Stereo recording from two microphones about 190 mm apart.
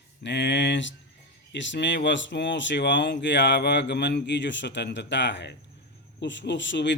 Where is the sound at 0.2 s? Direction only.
65° left (ahead or behind).